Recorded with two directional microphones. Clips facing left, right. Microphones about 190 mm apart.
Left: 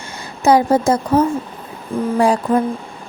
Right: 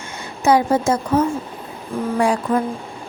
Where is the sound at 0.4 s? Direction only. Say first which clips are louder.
Left 3 dB; 35° left (ahead or behind).